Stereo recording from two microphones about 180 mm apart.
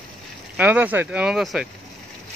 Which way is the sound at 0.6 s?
10° right (ahead or behind).